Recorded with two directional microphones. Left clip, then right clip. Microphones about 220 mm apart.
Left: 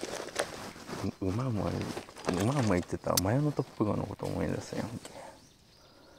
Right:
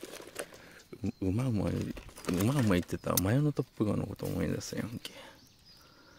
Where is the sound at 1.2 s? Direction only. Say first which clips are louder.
Right 2 dB; 40° right (ahead or behind).